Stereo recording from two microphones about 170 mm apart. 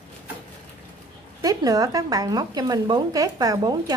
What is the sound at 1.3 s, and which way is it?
Speech, 20° right (ahead or behind).